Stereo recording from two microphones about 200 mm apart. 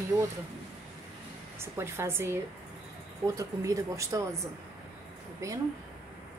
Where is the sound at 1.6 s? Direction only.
15° right (ahead or behind).